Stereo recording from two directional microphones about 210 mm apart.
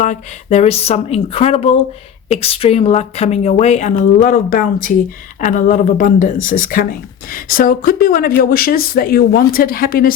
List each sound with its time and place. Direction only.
0.0 s a woman's voice: 35° left (ahead or behind)